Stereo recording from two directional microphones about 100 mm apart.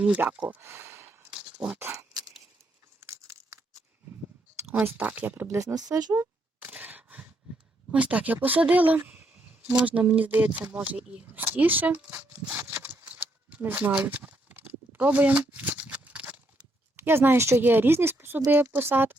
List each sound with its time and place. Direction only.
0.0 s speech: 10° right (ahead or behind); by 1.1 s 25° right (ahead or behind)
1.7 s speech: 15° right (ahead or behind)
2.0 s a sound: 40° right (ahead or behind)
4.7 s a woman's voice: 20° right (ahead or behind)
5.5 s speech: 35° right (ahead or behind)
6.1 s a sound: 15° right (ahead or behind)
7.9 s speech: 15° right (ahead or behind)
13.6 s a woman's voice: 20° right (ahead or behind)
13.9 s a sound: 15° right (ahead or behind)
17.0 s a woman's voice: 25° right (ahead or behind)